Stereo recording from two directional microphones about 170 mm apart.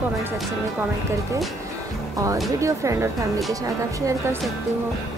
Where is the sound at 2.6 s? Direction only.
15° right (ahead or behind).